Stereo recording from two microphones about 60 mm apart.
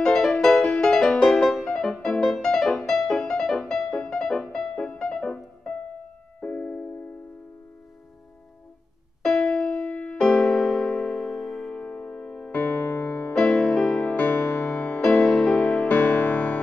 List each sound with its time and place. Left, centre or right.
0.0 s music: centre
9.2 s music: left
12.5 s music: left
13.3 s music: left
14.1 s music: left; by 15.9 s centre
15.9 s music: left